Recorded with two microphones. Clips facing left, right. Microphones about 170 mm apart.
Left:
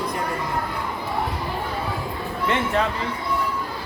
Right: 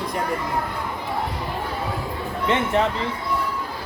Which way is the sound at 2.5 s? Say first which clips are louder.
Right 2 dB; 20° right (ahead or behind).